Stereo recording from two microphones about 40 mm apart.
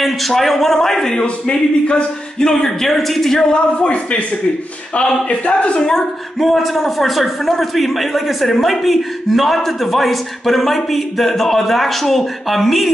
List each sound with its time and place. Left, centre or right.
0.0 s a man's voice: centre
1.2 s a man's voice: left
3.7 s speech: left
6.4 s speech: centre